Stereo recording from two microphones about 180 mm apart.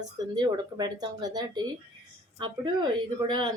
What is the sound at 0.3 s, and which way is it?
A woman's voice, 25° right (ahead or behind).